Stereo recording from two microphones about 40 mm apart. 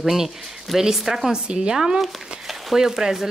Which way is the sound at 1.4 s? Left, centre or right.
Right.